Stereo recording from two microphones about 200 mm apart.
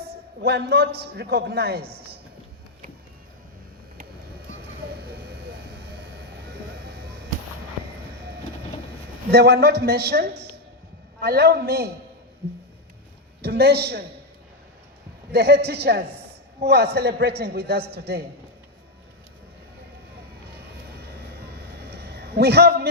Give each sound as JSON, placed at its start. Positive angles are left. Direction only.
{"t": 0.4, "sound": "a man's voice", "side_deg": -55}
{"t": 9.3, "sound": "a man's voice", "side_deg": -55}
{"t": 13.4, "sound": "a man's voice", "side_deg": -55}
{"t": 15.3, "sound": "a man's voice", "side_deg": -55}
{"t": 21.8, "sound": "a sound", "side_deg": -55}